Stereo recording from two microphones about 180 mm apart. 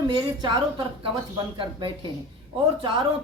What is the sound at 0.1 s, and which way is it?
Speech, 25° right (ahead or behind).